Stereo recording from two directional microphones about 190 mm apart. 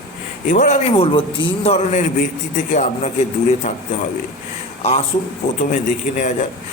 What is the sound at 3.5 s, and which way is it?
Speech, 40° left (ahead or behind).